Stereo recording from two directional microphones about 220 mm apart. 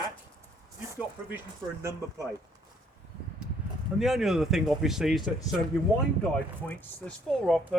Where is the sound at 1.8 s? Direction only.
15° right (ahead or behind).